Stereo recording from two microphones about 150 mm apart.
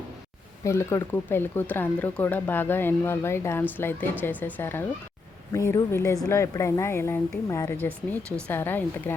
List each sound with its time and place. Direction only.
0.6 s speech: 20° left (ahead or behind)